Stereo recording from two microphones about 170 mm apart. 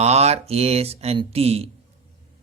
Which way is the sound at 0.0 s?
40° right (ahead or behind).